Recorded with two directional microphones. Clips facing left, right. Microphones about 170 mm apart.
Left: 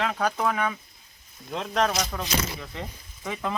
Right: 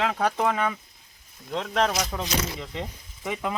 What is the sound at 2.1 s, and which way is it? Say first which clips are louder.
Speech: right 1 dB; 20° right (ahead or behind).